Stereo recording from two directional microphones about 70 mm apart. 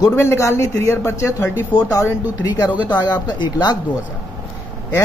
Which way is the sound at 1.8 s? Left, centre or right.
Left.